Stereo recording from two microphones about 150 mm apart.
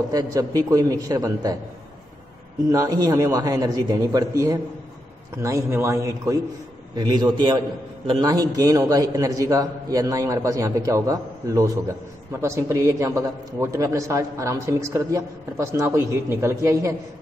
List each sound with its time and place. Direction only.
0.1 s a man's voice: 25° right (ahead or behind)
2.7 s a man's voice: 25° right (ahead or behind)